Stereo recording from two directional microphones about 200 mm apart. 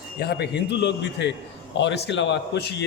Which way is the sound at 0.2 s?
55° left (ahead or behind).